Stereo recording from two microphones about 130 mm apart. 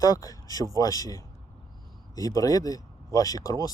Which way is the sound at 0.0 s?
30° left (ahead or behind).